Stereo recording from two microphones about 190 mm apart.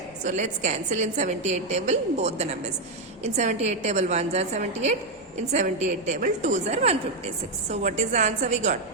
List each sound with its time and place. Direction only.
0.3 s a woman's voice: 40° right (ahead or behind)